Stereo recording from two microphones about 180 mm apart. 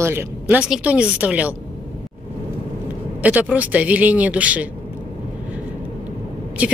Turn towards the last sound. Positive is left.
turn(degrees=-5)  # may be behind; listen again after turning